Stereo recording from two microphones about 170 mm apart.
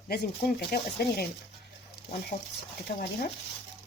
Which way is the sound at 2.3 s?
40° left (ahead or behind).